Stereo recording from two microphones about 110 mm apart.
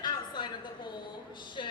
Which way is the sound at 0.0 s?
45° left (ahead or behind).